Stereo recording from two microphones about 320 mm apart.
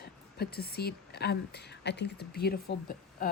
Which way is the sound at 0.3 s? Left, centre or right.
Left.